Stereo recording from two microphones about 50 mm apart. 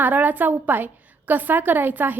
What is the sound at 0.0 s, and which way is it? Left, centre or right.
A woman's voice, right.